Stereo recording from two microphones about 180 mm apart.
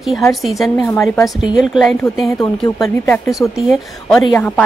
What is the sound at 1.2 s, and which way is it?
Speech, centre (ahead or behind).